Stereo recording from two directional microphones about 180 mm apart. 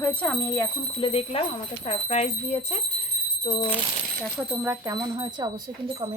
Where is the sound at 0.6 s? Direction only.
30° left (ahead or behind).